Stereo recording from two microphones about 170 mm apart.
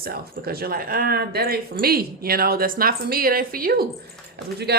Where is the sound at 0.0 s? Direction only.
65° right (ahead or behind).